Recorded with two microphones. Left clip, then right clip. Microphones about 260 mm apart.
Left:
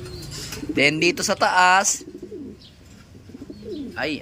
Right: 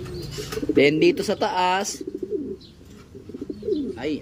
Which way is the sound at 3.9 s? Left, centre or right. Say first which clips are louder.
Left 2 dB; centre.